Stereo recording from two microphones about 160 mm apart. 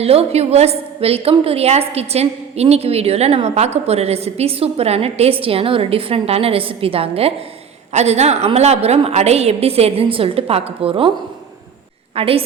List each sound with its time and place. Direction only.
0.0 s a woman's voice: 40° right (ahead or behind)
12.1 s a woman's voice: 35° right (ahead or behind)